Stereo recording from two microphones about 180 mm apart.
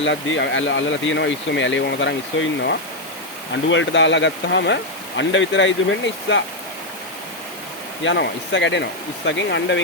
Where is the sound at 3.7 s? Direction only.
90° left.